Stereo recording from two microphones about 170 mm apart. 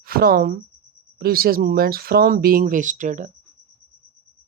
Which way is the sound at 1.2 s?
60° right (ahead or behind).